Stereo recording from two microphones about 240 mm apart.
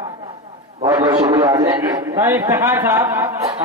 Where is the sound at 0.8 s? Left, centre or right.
Centre.